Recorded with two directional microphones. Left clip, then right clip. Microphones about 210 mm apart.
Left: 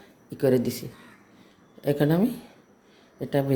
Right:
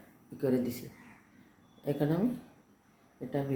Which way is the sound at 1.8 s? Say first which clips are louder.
Left 8 dB; 40° left (ahead or behind).